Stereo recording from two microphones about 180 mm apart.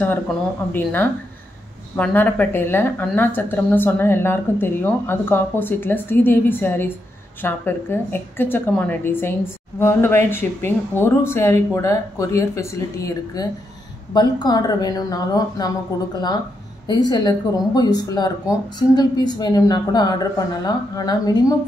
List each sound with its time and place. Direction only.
0.0 s a woman's voice: 10° left (ahead or behind)